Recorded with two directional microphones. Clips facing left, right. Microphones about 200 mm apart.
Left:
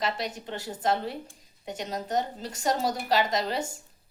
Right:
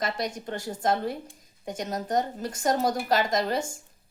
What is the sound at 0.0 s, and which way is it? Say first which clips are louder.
A woman's voice: right 1 dB; 45° right (ahead or behind).